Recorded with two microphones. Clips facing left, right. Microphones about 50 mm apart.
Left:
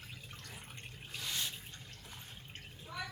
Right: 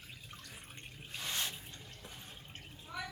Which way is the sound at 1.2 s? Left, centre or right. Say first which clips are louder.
Right 1 dB; right.